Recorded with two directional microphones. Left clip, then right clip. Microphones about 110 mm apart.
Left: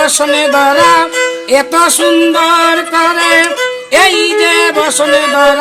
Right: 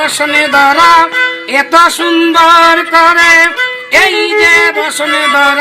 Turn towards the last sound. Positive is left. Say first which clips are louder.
# even
turn(degrees=45)  # may be behind; listen again after turning